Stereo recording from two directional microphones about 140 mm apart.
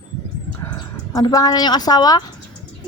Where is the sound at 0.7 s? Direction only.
30° left (ahead or behind).